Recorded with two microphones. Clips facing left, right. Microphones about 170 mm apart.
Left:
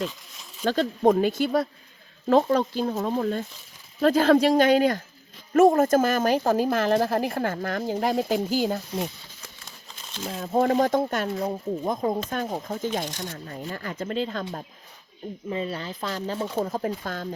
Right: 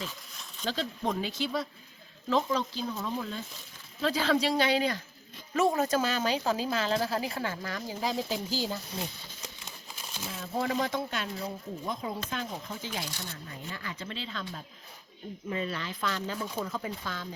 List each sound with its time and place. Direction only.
0.6 s speech: 50° left (ahead or behind)
10.2 s speech: 45° left (ahead or behind)
15.4 s speech: 25° left (ahead or behind); by 17.2 s 50° left (ahead or behind)